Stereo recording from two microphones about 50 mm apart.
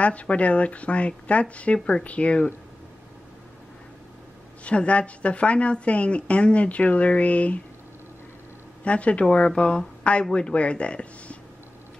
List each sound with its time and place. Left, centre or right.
0.0 s a woman's voice: left
4.6 s a woman's voice: left
8.8 s a woman's voice: left